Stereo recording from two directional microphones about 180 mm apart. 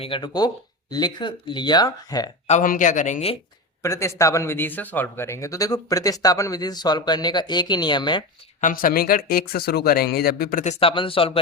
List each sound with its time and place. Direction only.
0.0 s speech: 25° left (ahead or behind)
2.5 s speech: 45° left (ahead or behind)
3.8 s speech: 15° left (ahead or behind)
8.6 s speech: 50° left (ahead or behind)
10.6 s speech: 35° left (ahead or behind)